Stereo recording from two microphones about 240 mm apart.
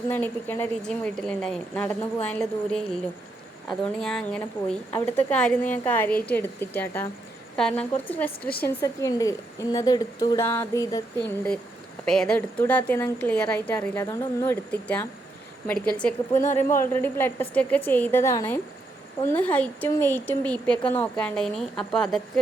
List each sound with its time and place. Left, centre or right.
0.1 s a woman's voice: centre
16.4 s speech: left
16.8 s a woman's voice: centre